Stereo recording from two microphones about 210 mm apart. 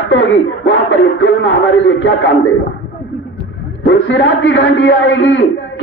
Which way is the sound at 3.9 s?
65° left (ahead or behind).